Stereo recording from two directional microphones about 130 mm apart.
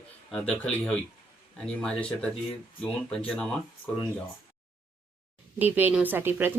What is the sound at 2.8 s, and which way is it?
Speech, 5° left (ahead or behind).